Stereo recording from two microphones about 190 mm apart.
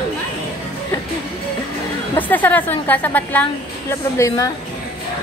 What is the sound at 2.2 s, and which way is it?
A woman's voice, 10° left (ahead or behind).